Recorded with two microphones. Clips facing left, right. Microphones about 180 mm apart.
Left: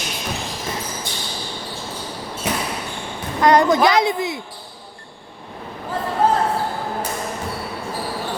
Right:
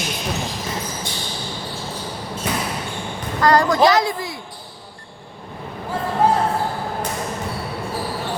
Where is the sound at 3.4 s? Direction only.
20° left (ahead or behind).